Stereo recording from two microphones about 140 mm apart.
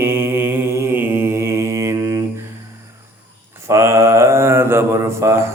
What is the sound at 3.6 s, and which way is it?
Mantra, 20° right (ahead or behind).